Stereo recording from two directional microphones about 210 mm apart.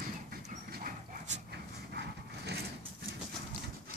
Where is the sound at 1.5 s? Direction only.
55° right (ahead or behind).